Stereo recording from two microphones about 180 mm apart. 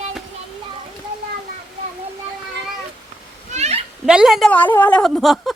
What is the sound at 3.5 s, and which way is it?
Children playing, 35° right (ahead or behind).